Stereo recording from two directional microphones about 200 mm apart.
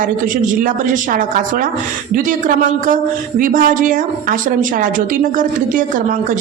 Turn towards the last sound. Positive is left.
turn(degrees=-45)  # may be behind; listen again after turning